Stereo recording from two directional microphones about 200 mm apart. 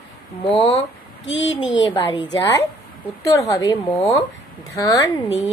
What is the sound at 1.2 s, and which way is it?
Speech, 70° left (ahead or behind).